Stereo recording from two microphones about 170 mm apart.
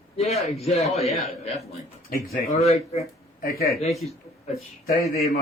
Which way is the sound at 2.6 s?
35° left (ahead or behind).